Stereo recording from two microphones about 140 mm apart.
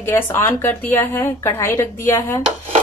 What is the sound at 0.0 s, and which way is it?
A woman's voice, 15° left (ahead or behind).